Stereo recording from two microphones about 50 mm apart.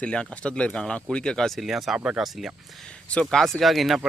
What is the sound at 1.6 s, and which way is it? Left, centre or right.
Speech, centre.